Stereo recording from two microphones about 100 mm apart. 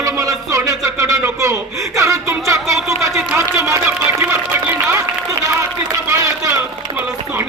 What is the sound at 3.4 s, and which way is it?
Speech, 30° right (ahead or behind).